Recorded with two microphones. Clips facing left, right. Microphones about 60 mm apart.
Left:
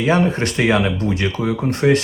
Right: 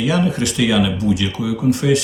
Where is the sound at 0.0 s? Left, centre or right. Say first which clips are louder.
Left 1 dB; left.